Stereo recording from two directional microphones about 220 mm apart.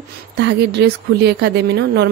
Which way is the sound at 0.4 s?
50° right (ahead or behind).